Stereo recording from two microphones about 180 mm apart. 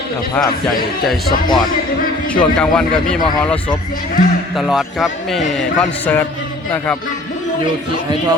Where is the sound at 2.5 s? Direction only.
5° left (ahead or behind).